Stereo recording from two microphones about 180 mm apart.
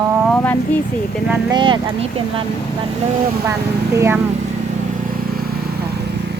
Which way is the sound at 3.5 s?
15° right (ahead or behind).